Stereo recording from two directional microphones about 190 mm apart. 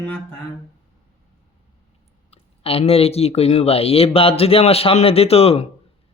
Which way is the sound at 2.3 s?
30° left (ahead or behind).